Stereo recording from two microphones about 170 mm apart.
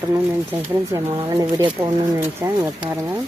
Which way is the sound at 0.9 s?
20° right (ahead or behind).